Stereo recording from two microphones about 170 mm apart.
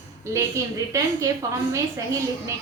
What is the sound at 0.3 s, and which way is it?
Speech, 20° right (ahead or behind).